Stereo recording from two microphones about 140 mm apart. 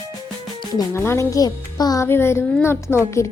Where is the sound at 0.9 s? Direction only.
20° left (ahead or behind).